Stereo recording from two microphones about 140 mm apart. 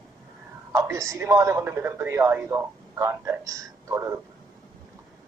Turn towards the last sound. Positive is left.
turn(degrees=-20)  # may be behind; listen again after turning